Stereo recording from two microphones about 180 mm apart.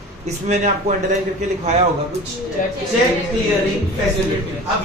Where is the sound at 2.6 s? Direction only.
45° left (ahead or behind).